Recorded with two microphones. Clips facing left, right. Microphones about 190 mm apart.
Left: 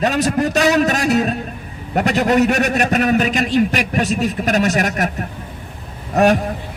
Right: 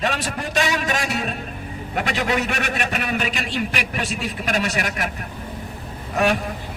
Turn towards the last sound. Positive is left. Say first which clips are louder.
# left 6 dB
turn(degrees=45)  # may be behind; listen again after turning